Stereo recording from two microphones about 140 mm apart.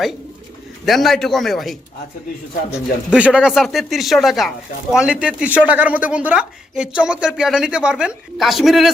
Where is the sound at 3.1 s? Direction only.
10° right (ahead or behind).